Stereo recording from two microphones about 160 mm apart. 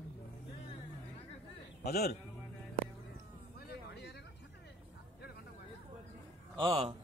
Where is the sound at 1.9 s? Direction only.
75° left (ahead or behind).